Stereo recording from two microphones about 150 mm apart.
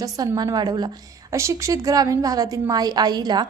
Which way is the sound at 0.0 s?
25° right (ahead or behind).